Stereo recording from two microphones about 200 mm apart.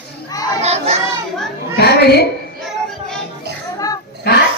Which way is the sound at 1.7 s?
55° left (ahead or behind).